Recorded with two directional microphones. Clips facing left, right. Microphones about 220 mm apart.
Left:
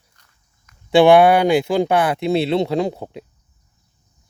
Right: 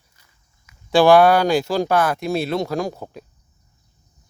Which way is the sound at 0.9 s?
20° left (ahead or behind).